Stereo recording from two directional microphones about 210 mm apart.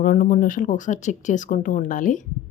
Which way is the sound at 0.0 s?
40° left (ahead or behind).